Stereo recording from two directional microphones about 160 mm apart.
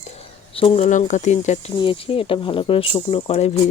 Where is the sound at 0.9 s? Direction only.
50° left (ahead or behind).